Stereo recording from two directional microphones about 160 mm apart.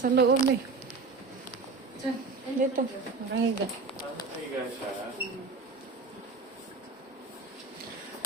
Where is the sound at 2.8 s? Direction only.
60° right (ahead or behind).